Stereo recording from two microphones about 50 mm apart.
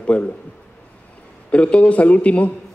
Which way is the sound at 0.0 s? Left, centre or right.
Left.